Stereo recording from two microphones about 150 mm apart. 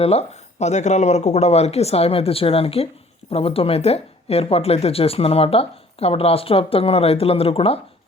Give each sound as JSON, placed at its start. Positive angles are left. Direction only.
{"t": 0.0, "sound": "speech", "side_deg": 45}